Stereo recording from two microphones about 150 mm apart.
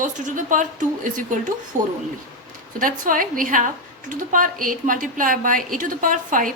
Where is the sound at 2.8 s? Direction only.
65° right (ahead or behind).